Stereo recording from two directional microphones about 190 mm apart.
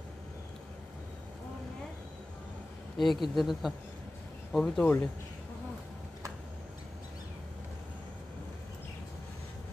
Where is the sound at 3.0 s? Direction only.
Centre (ahead or behind).